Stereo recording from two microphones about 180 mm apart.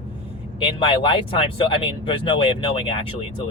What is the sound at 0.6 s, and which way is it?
Speech, 30° left (ahead or behind).